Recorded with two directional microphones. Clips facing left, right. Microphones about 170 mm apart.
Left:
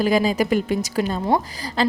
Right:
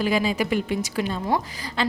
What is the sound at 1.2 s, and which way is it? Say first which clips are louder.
Speech: left 4 dB; 30° left (ahead or behind).